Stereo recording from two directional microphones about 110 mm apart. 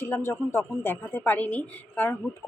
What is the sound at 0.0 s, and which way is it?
A woman's voice, 25° left (ahead or behind).